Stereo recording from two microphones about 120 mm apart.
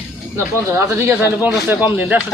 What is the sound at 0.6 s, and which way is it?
Speech, 20° right (ahead or behind).